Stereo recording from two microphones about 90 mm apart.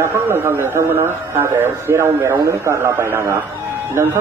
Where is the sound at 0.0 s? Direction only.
25° right (ahead or behind).